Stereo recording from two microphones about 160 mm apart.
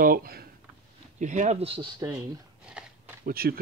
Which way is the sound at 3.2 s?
70° right (ahead or behind).